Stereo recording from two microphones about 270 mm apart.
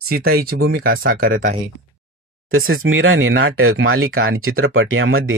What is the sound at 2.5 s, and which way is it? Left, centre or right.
Speech, right.